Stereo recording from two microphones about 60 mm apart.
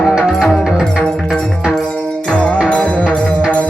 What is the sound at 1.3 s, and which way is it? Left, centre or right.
Music, centre.